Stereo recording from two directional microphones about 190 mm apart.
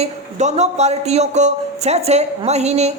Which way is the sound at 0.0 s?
35° right (ahead or behind).